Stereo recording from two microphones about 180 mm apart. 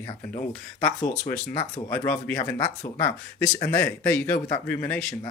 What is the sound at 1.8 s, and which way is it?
Speech, 15° left (ahead or behind).